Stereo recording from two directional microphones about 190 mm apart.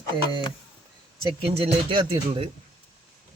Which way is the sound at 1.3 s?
30° right (ahead or behind).